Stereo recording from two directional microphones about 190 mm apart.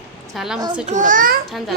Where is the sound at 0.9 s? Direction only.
40° right (ahead or behind).